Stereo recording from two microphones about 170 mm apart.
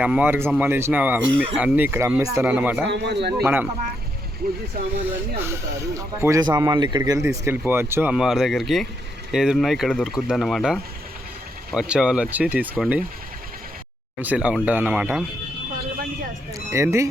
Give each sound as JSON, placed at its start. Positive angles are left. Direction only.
{"t": 0.0, "sound": "speech", "side_deg": -10}
{"t": 2.8, "sound": "a man's voice", "side_deg": -80}
{"t": 3.4, "sound": "speech", "side_deg": -10}
{"t": 4.8, "sound": "speech", "side_deg": -65}
{"t": 5.4, "sound": "speech", "side_deg": -15}
{"t": 14.2, "sound": "speech", "side_deg": -10}
{"t": 16.6, "sound": "speech", "side_deg": -15}